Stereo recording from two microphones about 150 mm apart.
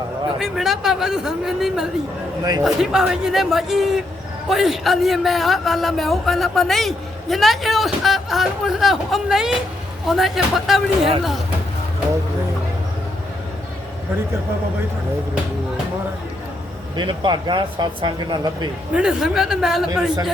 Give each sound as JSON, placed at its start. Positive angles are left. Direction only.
{"t": 0.3, "sound": "a man's voice", "side_deg": -5}
{"t": 17.0, "sound": "speech", "side_deg": -30}
{"t": 18.9, "sound": "a man's voice", "side_deg": -5}